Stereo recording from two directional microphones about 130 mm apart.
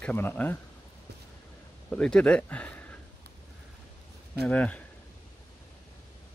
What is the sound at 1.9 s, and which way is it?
Speech, 5° left (ahead or behind).